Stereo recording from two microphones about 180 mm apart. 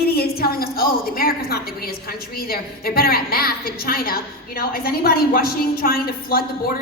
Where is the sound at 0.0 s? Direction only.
60° left (ahead or behind).